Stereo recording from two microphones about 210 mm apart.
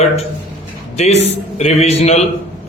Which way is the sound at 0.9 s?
30° left (ahead or behind).